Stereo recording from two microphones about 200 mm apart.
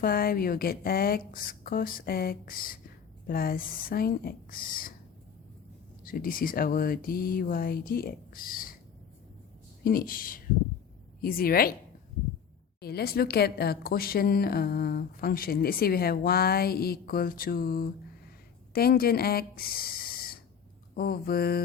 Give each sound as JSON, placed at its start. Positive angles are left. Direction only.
{"t": 0.0, "sound": "speech", "side_deg": 45}
{"t": 6.1, "sound": "speech", "side_deg": 45}
{"t": 9.8, "sound": "speech", "side_deg": 45}
{"t": 12.8, "sound": "speech", "side_deg": 50}